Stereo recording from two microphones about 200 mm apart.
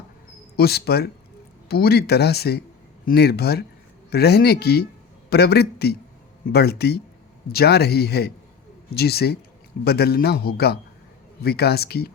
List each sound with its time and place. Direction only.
0.5 s speech: 50° left (ahead or behind)